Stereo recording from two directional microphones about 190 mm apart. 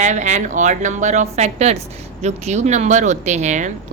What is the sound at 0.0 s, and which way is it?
Speech, 40° right (ahead or behind).